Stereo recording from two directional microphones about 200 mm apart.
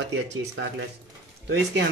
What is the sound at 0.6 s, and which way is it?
Speech, 75° right (ahead or behind).